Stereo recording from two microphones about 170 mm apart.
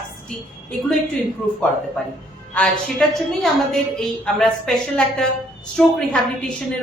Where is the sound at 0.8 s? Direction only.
Centre (ahead or behind).